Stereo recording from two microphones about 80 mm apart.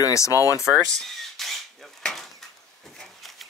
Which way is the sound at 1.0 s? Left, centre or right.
Centre.